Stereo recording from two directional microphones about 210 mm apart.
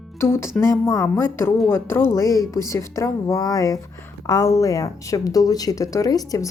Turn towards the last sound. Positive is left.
turn(degrees=15)  # may be behind; listen again after turning